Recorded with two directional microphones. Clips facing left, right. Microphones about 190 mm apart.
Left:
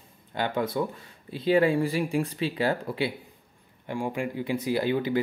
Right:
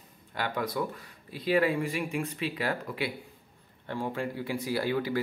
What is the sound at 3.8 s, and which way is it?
Speech, 15° left (ahead or behind).